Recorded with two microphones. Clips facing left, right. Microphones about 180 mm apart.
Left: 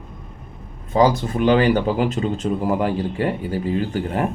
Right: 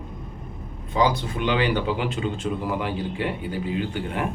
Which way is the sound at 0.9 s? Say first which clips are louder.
Left 5 dB; 45° left (ahead or behind).